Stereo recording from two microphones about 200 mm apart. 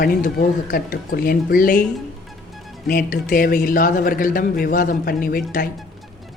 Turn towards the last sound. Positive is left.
turn(degrees=45)  # may be behind; listen again after turning